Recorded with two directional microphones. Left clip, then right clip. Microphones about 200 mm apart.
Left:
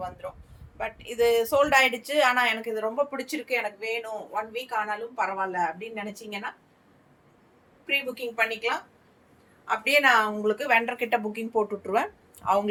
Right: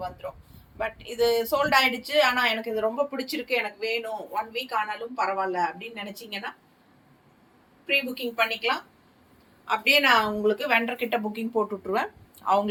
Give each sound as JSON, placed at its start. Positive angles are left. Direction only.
{"t": 0.8, "sound": "a woman's voice", "side_deg": 20}
{"t": 7.9, "sound": "a woman's voice", "side_deg": 15}